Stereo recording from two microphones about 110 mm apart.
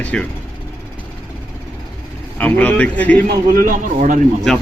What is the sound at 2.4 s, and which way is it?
Speech, 15° left (ahead or behind).